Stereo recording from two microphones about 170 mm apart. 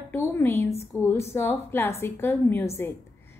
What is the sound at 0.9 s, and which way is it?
A woman's voice, 15° left (ahead or behind).